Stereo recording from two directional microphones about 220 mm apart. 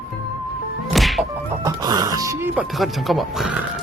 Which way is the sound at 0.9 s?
Centre (ahead or behind).